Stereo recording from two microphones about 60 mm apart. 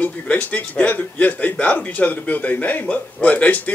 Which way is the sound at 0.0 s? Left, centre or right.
Left.